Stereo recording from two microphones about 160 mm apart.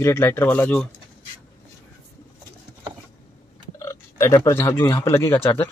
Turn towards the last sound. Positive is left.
turn(degrees=15)  # may be behind; listen again after turning